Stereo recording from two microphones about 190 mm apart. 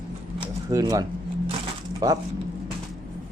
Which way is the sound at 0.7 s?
20° right (ahead or behind).